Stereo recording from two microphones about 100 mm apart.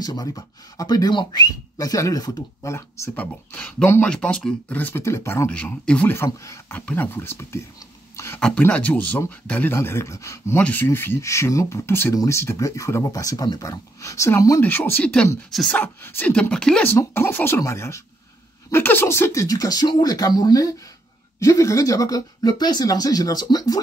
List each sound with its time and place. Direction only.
0.0 s speech: 40° left (ahead or behind)
3.2 s speech: 15° left (ahead or behind)
4.7 s speech: 20° left (ahead or behind)
5.5 s speech: 15° left (ahead or behind)
6.1 s speech: 25° left (ahead or behind)
6.7 s speech: 15° left (ahead or behind)
8.4 s speech: 5° left (ahead or behind); by 14.6 s 30° left (ahead or behind)
14.6 s speech: 20° left (ahead or behind)
16.8 s speech: 25° left (ahead or behind); by 23.8 s 40° left (ahead or behind)